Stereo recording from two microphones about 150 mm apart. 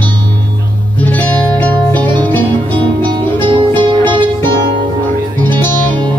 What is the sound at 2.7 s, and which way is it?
Music, 35° right (ahead or behind).